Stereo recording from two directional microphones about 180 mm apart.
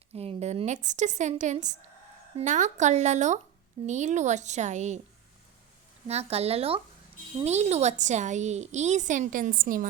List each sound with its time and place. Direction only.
0.1 s a woman's voice: 35° right (ahead or behind)
6.1 s a woman's voice: 35° right (ahead or behind)